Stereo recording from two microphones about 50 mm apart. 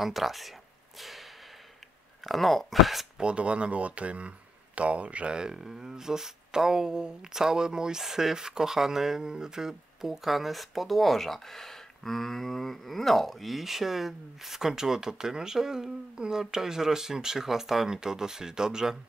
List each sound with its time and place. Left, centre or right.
0.0 s speech: centre
2.2 s speech: centre
3.2 s speech: right